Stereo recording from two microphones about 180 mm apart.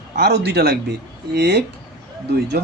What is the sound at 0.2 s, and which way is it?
Speech, 65° right (ahead or behind).